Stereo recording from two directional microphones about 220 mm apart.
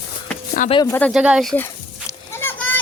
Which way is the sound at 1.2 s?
5° right (ahead or behind).